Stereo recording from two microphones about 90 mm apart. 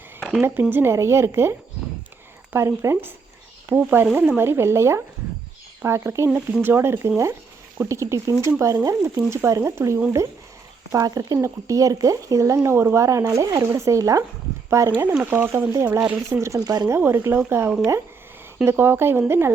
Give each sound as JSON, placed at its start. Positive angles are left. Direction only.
{"t": 0.2, "sound": "a sound", "side_deg": 0}
{"t": 0.4, "sound": "speech", "side_deg": -25}
{"t": 16.0, "sound": "speech", "side_deg": -10}
{"t": 16.3, "sound": "speech", "side_deg": -35}
{"t": 17.0, "sound": "speech", "side_deg": -25}